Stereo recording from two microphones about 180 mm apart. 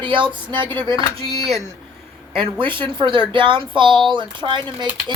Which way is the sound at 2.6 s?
30° right (ahead or behind).